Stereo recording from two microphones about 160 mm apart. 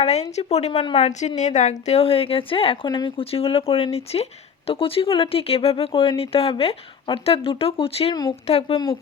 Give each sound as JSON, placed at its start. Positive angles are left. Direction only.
{"t": 0.0, "sound": "speech", "side_deg": 45}
{"t": 8.1, "sound": "speech", "side_deg": 25}
{"t": 8.4, "sound": "speech", "side_deg": 40}